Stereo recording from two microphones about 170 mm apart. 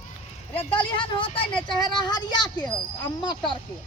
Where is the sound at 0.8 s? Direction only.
30° left (ahead or behind).